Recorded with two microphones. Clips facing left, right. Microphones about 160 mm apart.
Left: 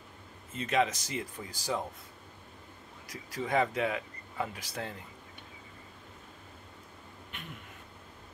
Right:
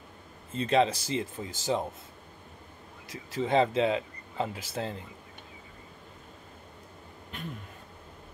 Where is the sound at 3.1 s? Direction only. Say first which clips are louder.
Right 5 dB; 25° right (ahead or behind).